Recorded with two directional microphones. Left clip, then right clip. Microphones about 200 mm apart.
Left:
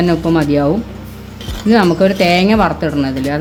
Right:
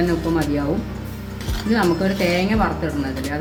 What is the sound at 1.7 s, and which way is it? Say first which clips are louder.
Speech: left 8 dB; 50° left (ahead or behind).